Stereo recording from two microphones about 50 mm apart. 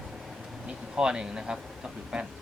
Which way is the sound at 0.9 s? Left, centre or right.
Centre.